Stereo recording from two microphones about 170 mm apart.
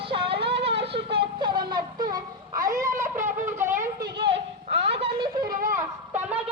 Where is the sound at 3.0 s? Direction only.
15° right (ahead or behind).